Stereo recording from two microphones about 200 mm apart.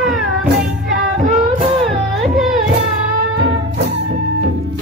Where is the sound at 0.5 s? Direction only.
40° right (ahead or behind).